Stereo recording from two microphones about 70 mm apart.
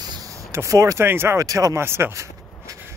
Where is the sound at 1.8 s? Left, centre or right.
Right.